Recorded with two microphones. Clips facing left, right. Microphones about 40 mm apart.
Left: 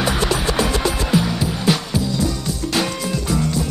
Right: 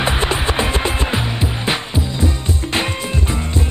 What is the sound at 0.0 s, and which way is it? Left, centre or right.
Music, right.